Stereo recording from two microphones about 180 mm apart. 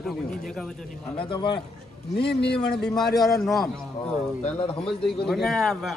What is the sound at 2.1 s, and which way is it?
Speech, 65° left (ahead or behind).